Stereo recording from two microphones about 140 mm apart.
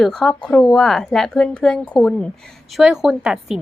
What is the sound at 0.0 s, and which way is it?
A woman's voice, 5° left (ahead or behind).